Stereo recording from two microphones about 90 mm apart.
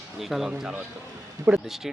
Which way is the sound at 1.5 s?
20° right (ahead or behind).